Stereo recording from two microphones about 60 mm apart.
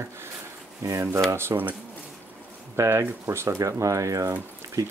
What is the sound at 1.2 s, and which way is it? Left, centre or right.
Speech, right.